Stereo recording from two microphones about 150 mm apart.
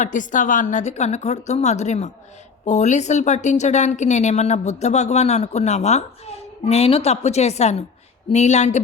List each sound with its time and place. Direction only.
0.0 s a woman's voice: 60° left (ahead or behind)